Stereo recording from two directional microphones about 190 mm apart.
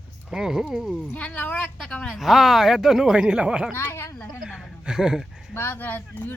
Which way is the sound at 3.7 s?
15° left (ahead or behind).